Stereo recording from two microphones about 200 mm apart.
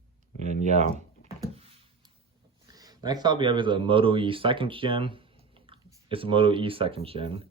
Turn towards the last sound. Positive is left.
turn(degrees=-30)  # may be behind; listen again after turning